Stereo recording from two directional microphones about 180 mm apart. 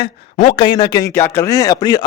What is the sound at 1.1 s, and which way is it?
Speech, 15° left (ahead or behind).